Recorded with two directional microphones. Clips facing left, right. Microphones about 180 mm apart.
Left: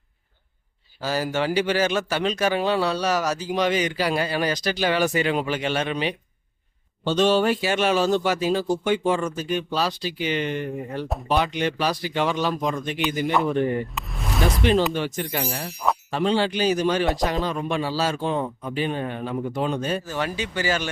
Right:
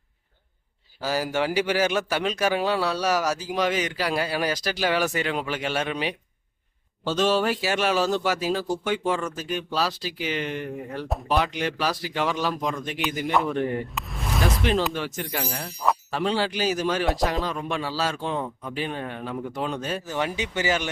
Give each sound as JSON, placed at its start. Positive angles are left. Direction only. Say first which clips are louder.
{"t": 1.0, "sound": "speech", "louder": "left 1 dB", "side_deg": -10}
{"t": 20.1, "sound": "speech", "louder": "even", "side_deg": -15}